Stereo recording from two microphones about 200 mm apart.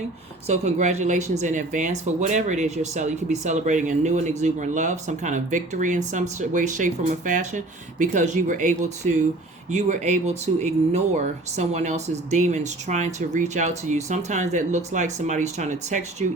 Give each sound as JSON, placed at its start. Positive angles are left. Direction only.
{"t": 0.4, "sound": "speech", "side_deg": -35}